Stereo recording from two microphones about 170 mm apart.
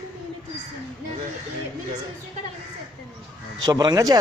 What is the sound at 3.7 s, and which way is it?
Speech, 20° right (ahead or behind).